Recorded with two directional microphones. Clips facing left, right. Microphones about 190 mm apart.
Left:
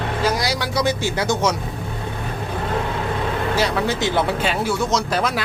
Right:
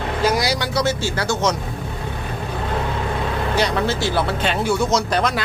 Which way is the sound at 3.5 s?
5° left (ahead or behind).